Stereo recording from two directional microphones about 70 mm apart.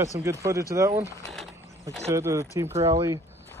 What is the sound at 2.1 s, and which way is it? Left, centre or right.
Speech, right.